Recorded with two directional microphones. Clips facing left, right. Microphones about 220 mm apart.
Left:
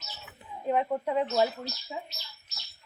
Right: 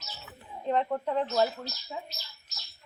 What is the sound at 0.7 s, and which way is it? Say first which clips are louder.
Speech: left 1 dB; 10° left (ahead or behind).